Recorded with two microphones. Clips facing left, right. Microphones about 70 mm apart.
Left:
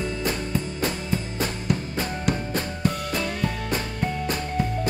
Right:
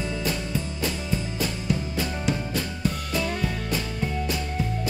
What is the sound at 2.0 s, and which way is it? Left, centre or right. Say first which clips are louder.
Music: left 1 dB; left.